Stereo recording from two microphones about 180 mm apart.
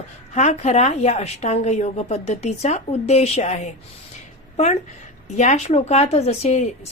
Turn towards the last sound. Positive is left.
turn(degrees=35)  # may be behind; listen again after turning